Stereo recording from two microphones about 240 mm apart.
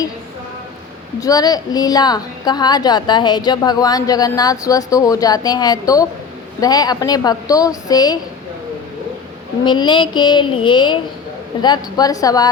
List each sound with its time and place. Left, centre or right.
1.2 s a woman's voice: centre
9.6 s a sound: centre
11.6 s a woman's voice: centre